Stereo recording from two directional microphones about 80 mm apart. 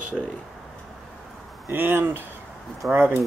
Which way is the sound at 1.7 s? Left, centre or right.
Right.